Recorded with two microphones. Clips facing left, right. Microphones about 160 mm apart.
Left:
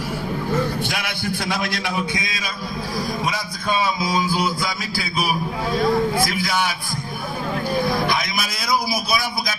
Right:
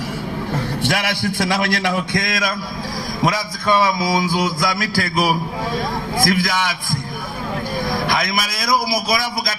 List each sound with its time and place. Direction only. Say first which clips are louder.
0.8 s a man's voice: right 5 dB; 75° right (ahead or behind); by 6.7 s 90° right
8.0 s a man's voice: right 2 dB; 90° right
8.4 s a man's voice: right 3 dB; 5° left (ahead or behind)
8.9 s a man's voice: right 3 dB; 90° right